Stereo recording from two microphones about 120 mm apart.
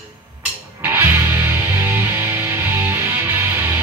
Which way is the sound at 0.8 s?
15° right (ahead or behind).